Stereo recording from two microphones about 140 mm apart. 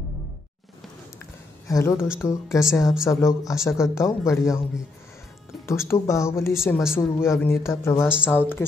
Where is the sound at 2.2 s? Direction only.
20° left (ahead or behind).